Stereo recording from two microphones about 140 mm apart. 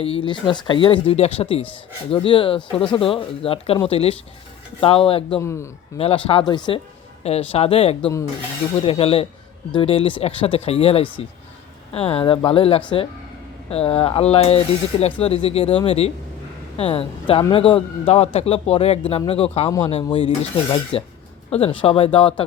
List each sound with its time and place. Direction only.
0.0 s a man's voice: 40° left (ahead or behind)
5.4 s a man's voice: 20° left (ahead or behind)
6.0 s a man's voice: 40° left (ahead or behind)